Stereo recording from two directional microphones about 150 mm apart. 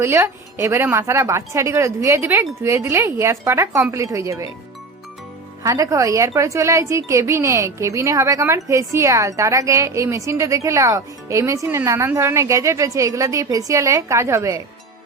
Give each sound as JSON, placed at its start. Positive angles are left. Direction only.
{"t": 0.0, "sound": "a woman's voice", "side_deg": -15}
{"t": 5.6, "sound": "a woman's voice", "side_deg": -20}